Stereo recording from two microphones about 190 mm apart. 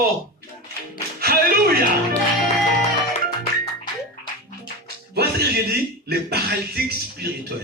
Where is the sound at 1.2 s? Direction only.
50° right (ahead or behind).